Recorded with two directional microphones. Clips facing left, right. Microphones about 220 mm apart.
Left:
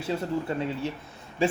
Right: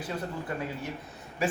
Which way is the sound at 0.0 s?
25° left (ahead or behind).